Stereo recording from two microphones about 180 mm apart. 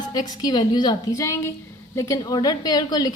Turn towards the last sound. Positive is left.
turn(degrees=20)  # may be behind; listen again after turning